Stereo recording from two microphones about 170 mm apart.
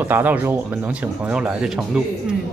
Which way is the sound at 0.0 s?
10° right (ahead or behind).